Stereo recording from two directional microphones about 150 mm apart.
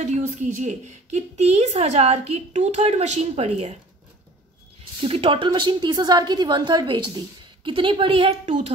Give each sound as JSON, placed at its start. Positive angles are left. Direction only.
{"t": 0.0, "sound": "a woman's voice", "side_deg": -55}
{"t": 5.0, "sound": "a woman's voice", "side_deg": -40}